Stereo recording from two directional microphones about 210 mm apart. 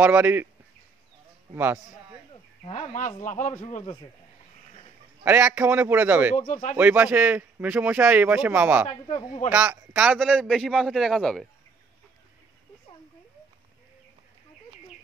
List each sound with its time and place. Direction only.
0.0 s a man's voice: 10° right (ahead or behind)
1.5 s a man's voice: 10° right (ahead or behind)
2.6 s a man's voice: 30° left (ahead or behind)
5.2 s a man's voice: 10° right (ahead or behind)
6.3 s a man's voice: 35° left (ahead or behind)
6.8 s a man's voice: 10° right (ahead or behind)
9.0 s a man's voice: 30° left (ahead or behind)
9.5 s speech: 10° right (ahead or behind)